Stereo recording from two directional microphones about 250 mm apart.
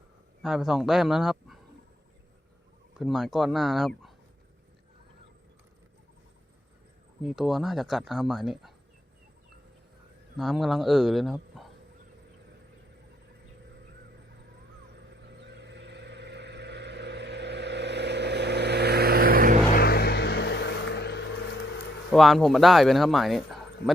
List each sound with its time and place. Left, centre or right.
0.4 s speech: centre
3.0 s speech: centre
7.2 s speech: centre
10.3 s speech: centre
14.9 s vehicle: right
19.7 s music: left
22.1 s speech: centre